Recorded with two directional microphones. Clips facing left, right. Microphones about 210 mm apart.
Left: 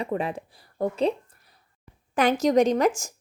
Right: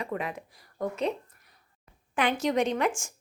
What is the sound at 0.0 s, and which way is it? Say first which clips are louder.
Speech: left 5 dB; 30° left (ahead or behind).